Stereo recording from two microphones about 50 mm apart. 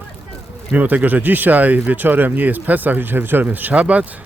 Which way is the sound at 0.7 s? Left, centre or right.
Right.